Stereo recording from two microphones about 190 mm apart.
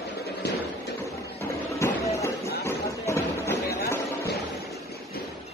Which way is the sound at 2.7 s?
15° left (ahead or behind).